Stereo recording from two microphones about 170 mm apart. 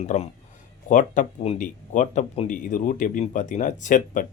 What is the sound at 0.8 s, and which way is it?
Speech, 50° left (ahead or behind).